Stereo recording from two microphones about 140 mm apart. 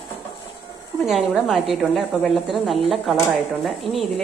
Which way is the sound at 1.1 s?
Centre (ahead or behind).